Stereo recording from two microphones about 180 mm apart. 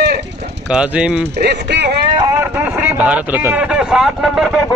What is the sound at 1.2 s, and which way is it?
Speech, 70° right (ahead or behind).